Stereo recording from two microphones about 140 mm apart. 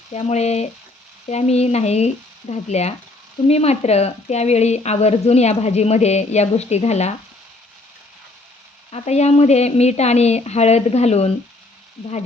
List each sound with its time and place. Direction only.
0.1 s speech: 50° left (ahead or behind)
8.9 s speech: 50° left (ahead or behind)